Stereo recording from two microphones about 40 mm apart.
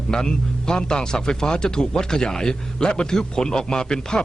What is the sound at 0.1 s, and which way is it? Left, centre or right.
A man's voice, centre.